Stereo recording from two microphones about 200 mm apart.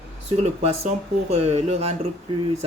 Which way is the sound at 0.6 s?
30° right (ahead or behind).